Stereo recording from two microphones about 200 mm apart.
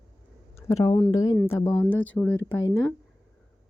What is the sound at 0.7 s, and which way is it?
Speech, 15° left (ahead or behind).